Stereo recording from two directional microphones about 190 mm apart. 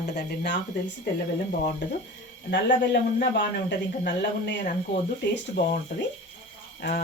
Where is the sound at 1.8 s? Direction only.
70° left (ahead or behind).